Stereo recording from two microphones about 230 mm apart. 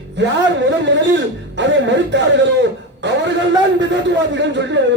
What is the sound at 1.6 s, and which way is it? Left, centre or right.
A man's voice, right.